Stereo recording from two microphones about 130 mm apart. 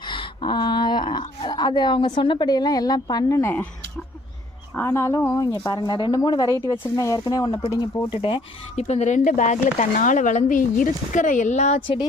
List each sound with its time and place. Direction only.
0.0 s speech: 35° left (ahead or behind)
4.7 s speech: 20° left (ahead or behind)
8.2 s speech: 50° left (ahead or behind); by 11.8 s 65° left (ahead or behind)